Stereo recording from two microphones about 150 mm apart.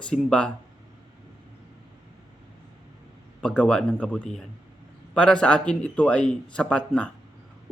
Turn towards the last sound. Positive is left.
turn(degrees=5)  # may be behind; listen again after turning